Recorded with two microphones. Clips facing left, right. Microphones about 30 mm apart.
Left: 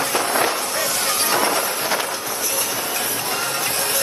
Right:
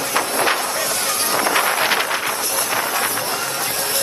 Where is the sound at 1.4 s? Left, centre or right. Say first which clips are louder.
Right 3 dB; right.